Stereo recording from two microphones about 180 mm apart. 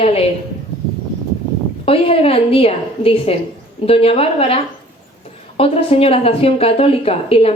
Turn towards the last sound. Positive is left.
turn(degrees=30)  # may be behind; listen again after turning